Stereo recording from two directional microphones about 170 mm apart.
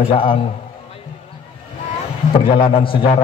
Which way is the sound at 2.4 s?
30° left (ahead or behind).